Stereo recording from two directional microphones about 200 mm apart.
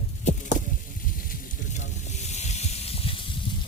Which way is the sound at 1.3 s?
35° left (ahead or behind).